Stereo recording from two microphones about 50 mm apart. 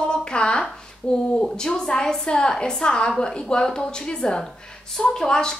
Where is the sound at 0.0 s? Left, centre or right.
Centre.